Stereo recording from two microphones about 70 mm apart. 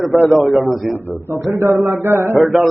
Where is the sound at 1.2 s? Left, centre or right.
Right.